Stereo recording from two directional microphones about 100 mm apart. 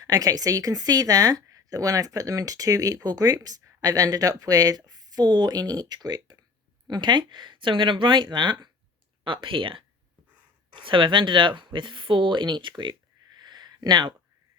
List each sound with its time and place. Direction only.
0.0 s speech: 40° right (ahead or behind)
9.2 s speech: 60° right (ahead or behind)